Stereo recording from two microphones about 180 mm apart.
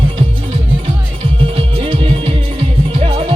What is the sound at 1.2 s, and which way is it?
Music, 30° right (ahead or behind).